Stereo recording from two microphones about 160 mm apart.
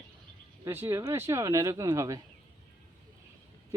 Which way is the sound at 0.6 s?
15° right (ahead or behind).